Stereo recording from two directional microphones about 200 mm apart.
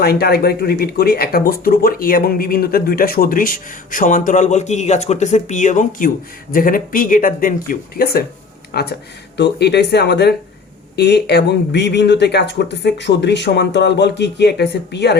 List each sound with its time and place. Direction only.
0.0 s speech: 50° left (ahead or behind)